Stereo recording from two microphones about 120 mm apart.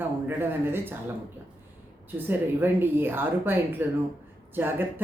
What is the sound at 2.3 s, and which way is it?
Speech, 15° right (ahead or behind).